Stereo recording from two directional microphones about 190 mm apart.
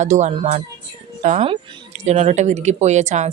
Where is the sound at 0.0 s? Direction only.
40° right (ahead or behind).